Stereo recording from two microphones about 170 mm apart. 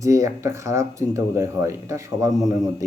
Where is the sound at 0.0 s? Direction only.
20° right (ahead or behind).